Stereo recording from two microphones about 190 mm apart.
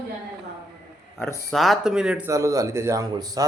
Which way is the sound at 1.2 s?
Centre (ahead or behind).